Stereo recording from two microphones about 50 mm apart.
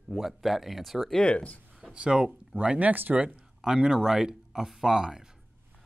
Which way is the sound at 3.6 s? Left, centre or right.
Centre.